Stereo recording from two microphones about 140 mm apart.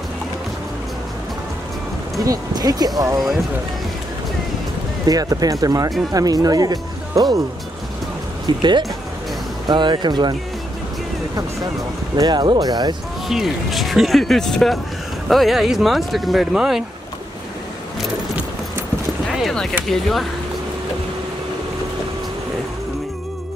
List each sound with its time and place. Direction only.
2.2 s speech: 25° right (ahead or behind)
5.0 s speech: 25° right (ahead or behind)
8.5 s speech: 35° right (ahead or behind)
12.2 s speech: 30° right (ahead or behind)
13.3 s speech: centre (ahead or behind)
19.3 s a sound: centre (ahead or behind)
19.9 s speech: centre (ahead or behind)